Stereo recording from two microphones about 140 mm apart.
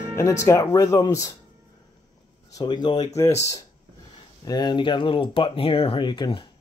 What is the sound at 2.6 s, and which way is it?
Speech, 30° left (ahead or behind).